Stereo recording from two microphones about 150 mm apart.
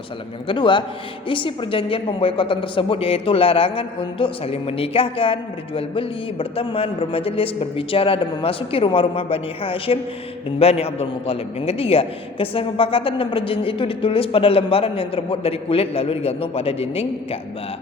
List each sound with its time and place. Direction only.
0.4 s a woman's voice: 35° left (ahead or behind)